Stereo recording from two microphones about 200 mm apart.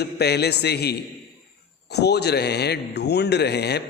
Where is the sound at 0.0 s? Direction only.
55° left (ahead or behind).